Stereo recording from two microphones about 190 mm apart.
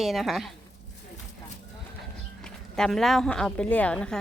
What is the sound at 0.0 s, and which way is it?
Speech, centre (ahead or behind).